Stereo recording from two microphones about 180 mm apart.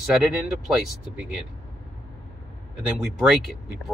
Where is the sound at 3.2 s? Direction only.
Centre (ahead or behind).